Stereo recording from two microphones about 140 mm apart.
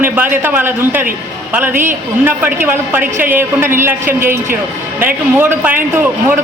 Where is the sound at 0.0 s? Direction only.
15° right (ahead or behind).